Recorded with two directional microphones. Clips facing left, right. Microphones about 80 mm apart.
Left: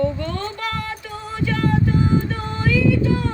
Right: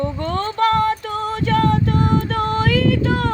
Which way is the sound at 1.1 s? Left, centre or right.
Right.